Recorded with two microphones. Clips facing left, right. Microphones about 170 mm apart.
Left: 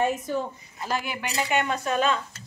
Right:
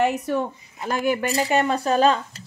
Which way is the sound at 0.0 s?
70° right (ahead or behind).